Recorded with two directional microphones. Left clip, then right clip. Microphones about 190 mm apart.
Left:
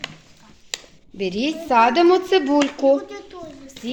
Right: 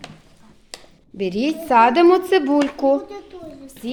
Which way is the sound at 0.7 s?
30° left (ahead or behind).